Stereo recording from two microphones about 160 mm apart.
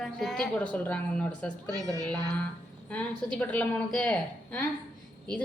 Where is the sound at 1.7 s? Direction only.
20° right (ahead or behind).